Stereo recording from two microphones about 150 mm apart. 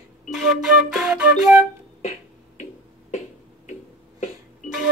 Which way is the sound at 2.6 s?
50° left (ahead or behind).